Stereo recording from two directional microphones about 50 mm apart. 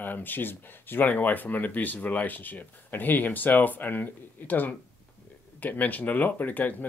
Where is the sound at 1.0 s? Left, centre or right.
Left.